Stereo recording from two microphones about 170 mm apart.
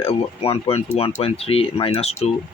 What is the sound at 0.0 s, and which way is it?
Speech, 35° left (ahead or behind).